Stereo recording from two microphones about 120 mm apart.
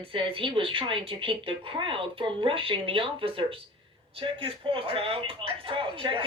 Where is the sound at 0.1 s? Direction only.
45° right (ahead or behind).